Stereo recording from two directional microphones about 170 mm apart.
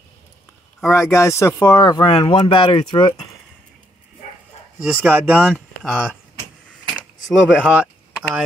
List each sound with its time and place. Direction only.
0.9 s speech: 15° left (ahead or behind)
4.8 s speech: 5° right (ahead or behind)
7.2 s speech: centre (ahead or behind)